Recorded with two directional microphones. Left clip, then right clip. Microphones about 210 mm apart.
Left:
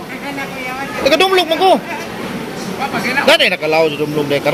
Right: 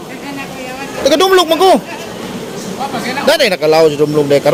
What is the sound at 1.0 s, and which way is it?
Speech, 35° right (ahead or behind).